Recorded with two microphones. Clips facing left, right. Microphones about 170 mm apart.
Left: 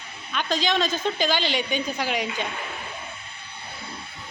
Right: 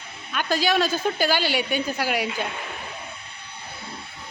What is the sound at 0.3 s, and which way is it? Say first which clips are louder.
Speech: right 2 dB; 10° right (ahead or behind).